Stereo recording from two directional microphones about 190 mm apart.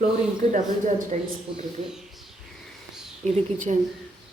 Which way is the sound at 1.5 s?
25° right (ahead or behind).